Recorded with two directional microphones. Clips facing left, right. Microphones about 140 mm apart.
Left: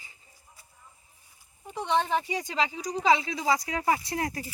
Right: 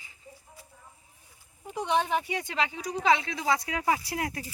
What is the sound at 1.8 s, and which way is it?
Speech, 10° right (ahead or behind).